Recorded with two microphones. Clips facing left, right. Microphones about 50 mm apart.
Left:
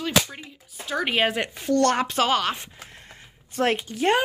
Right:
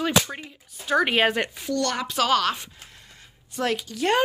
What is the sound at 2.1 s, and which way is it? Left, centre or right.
Speech, left.